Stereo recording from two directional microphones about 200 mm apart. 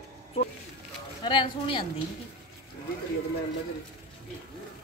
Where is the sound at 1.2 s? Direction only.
25° left (ahead or behind).